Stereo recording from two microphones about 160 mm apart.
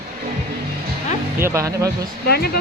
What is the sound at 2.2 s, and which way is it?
Speech, 80° left.